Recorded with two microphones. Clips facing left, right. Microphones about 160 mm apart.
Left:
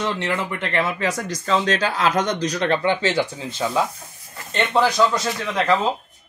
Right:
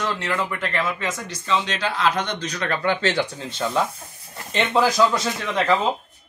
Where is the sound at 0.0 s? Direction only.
25° left (ahead or behind).